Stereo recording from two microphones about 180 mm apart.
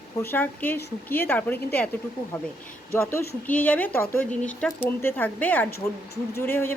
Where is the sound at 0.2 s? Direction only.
10° left (ahead or behind).